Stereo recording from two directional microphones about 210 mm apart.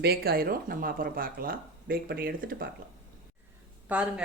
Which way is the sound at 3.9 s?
5° right (ahead or behind).